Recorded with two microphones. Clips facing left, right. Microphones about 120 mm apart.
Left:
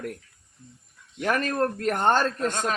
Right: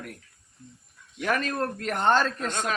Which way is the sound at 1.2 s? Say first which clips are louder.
Left 3 dB; 45° left (ahead or behind).